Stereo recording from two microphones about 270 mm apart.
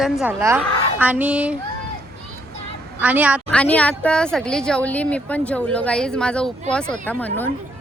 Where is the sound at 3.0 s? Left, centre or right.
Centre.